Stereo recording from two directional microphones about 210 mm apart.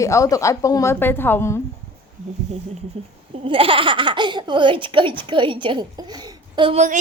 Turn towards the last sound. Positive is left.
turn(degrees=-30)  # may be behind; listen again after turning